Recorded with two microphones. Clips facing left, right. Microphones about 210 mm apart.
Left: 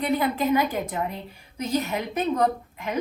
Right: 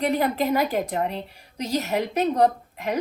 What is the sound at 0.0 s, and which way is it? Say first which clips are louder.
A woman's voice: right 1 dB; 40° right (ahead or behind).